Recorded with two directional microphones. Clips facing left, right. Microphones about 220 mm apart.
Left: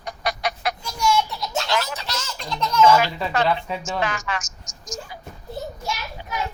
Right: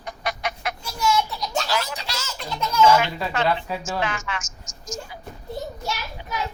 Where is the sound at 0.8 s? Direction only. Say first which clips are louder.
Even; 5° right (ahead or behind).